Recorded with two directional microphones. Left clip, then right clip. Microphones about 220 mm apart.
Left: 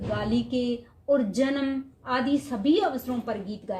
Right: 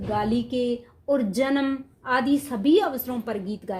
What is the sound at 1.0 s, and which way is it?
Speech, 45° right (ahead or behind).